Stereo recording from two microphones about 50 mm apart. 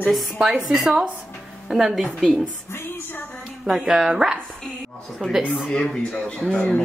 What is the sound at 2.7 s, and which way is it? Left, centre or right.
Music, left.